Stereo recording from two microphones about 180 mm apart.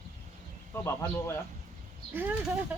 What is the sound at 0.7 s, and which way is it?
Speech, 15° left (ahead or behind).